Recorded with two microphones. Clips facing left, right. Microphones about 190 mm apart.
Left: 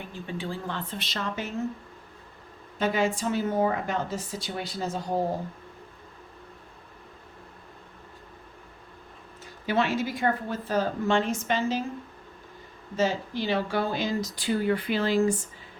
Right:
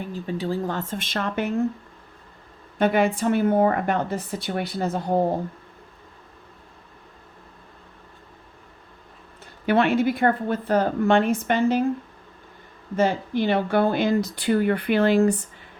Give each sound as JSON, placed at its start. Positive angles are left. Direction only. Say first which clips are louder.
{"t": 0.1, "sound": "speech", "louder": "right 7 dB", "side_deg": -40}
{"t": 2.7, "sound": "a woman's voice", "louder": "right 5 dB", "side_deg": -60}
{"t": 9.6, "sound": "a woman's voice", "louder": "right 7 dB", "side_deg": -60}
{"t": 13.0, "sound": "a woman's voice", "louder": "right 5 dB", "side_deg": -55}